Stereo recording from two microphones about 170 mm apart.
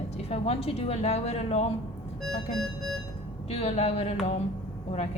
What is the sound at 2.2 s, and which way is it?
Music, centre (ahead or behind).